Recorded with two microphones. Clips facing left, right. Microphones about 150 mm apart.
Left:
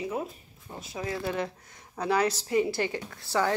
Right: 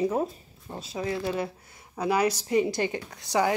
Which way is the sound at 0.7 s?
25° right (ahead or behind).